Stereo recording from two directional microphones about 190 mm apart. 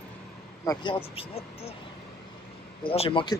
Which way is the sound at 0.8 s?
30° left (ahead or behind).